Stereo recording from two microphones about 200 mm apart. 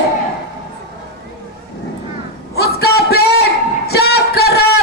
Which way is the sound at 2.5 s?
55° left (ahead or behind).